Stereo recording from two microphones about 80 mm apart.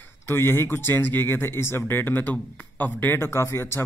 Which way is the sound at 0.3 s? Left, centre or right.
Left.